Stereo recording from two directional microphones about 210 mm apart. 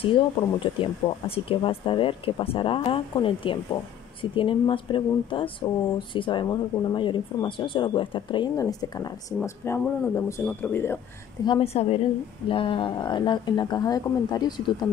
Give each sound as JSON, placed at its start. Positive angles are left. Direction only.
{"t": 0.7, "sound": "speech", "side_deg": 25}
{"t": 11.4, "sound": "speech", "side_deg": 25}